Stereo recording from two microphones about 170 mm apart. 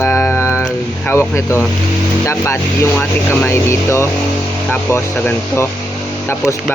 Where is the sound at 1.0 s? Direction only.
15° left (ahead or behind).